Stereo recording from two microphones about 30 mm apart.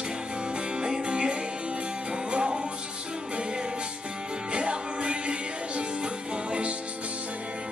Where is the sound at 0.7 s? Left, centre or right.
Right.